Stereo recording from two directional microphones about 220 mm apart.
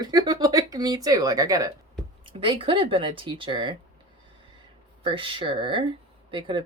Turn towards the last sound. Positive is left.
turn(degrees=-20)  # may be behind; listen again after turning